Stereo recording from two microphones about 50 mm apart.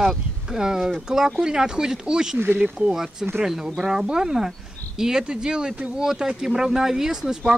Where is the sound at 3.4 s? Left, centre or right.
Centre.